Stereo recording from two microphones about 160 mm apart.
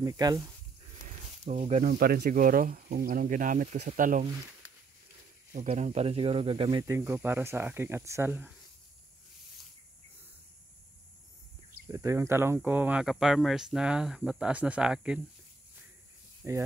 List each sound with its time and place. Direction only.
0.0 s speech: 25° right (ahead or behind)
1.0 s a sound: 50° right (ahead or behind)
1.9 s speech: 80° right
4.0 s speech: 55° right (ahead or behind)
5.5 s speech: 45° right (ahead or behind)
6.8 s speech: 15° right (ahead or behind)
11.9 s speech: 20° right (ahead or behind)
16.4 s speech: 20° right (ahead or behind)